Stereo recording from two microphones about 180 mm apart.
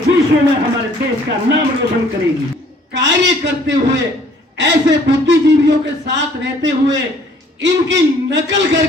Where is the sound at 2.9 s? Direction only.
80° right.